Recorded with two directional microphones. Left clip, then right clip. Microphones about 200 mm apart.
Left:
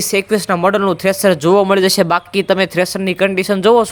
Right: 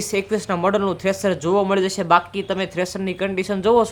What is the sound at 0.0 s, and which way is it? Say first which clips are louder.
Speech: left 7 dB; 25° left (ahead or behind).